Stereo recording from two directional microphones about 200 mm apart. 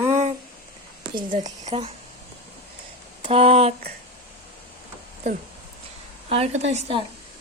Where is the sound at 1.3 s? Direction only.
35° right (ahead or behind).